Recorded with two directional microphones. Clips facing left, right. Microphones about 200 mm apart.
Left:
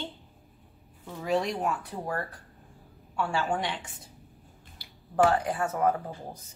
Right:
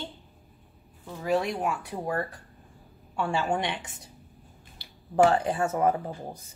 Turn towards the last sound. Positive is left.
turn(degrees=-20)  # may be behind; listen again after turning